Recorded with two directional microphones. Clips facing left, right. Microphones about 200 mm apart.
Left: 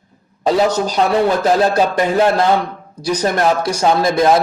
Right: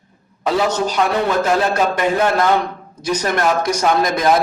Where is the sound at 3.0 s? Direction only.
35° left (ahead or behind).